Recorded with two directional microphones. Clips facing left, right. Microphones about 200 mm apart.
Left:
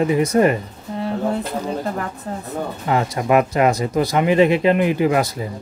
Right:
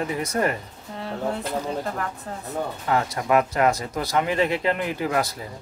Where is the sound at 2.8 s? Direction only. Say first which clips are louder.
Left 5 dB; 20° left (ahead or behind).